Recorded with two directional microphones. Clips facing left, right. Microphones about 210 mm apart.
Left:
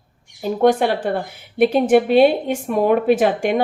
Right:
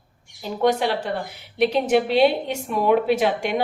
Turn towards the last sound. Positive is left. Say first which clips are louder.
# left 5 dB
turn(degrees=50)  # may be behind; listen again after turning